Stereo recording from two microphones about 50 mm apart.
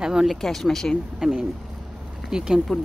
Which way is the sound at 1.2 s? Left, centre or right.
Centre.